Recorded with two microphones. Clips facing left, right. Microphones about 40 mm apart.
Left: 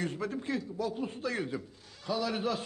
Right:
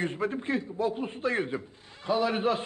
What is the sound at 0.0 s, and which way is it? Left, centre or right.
A woman's voice, right.